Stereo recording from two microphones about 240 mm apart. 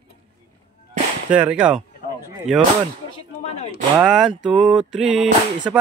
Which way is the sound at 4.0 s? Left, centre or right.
Centre.